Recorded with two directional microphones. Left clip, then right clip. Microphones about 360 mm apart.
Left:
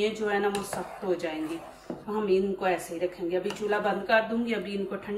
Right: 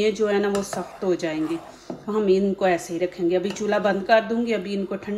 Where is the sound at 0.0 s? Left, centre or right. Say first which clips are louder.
Right 6 dB; centre.